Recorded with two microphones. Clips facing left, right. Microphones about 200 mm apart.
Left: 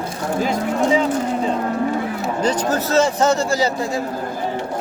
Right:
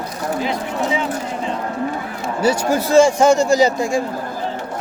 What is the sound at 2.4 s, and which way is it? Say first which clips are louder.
A man's voice: right 3 dB; 10° right (ahead or behind).